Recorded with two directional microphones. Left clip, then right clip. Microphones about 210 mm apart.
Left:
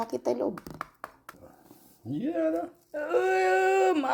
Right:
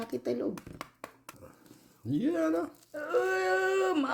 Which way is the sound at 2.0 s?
45° right (ahead or behind).